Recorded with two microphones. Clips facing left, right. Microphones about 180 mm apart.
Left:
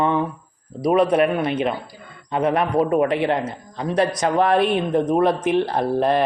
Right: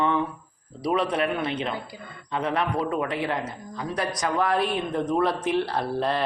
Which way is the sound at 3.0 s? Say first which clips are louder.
Left 8 dB; 60° left (ahead or behind).